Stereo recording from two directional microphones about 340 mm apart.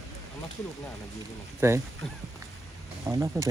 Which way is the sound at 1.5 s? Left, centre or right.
Centre.